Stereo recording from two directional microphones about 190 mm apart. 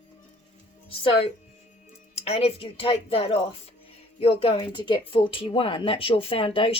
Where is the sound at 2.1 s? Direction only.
35° left (ahead or behind).